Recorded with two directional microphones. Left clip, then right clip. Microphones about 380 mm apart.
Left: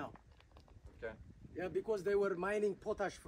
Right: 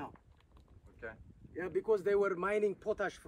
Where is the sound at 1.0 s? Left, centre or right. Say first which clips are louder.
Even; centre.